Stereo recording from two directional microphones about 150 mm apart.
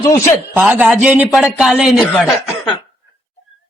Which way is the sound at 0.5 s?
10° right (ahead or behind).